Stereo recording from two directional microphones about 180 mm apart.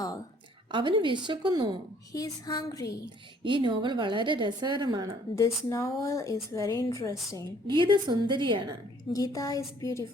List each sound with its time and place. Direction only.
0.7 s a woman's voice: 25° right (ahead or behind)
2.1 s a woman's voice: 20° left (ahead or behind)
3.4 s a woman's voice: 25° right (ahead or behind)
5.3 s a woman's voice: 15° left (ahead or behind)
7.7 s a woman's voice: 25° right (ahead or behind)
9.1 s a woman's voice: 20° left (ahead or behind)